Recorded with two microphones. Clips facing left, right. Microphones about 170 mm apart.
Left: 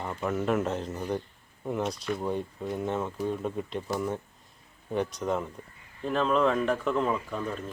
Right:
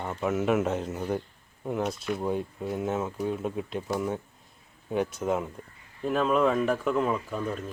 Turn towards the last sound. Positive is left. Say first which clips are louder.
# right 1 dB
turn(degrees=-5)  # may be behind; listen again after turning